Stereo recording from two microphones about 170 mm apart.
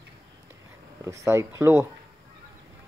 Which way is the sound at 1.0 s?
15° right (ahead or behind).